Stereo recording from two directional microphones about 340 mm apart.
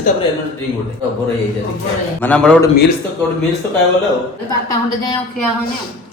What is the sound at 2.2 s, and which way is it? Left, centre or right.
Speech, centre.